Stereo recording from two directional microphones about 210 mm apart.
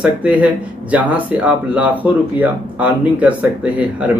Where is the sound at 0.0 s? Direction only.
5° right (ahead or behind).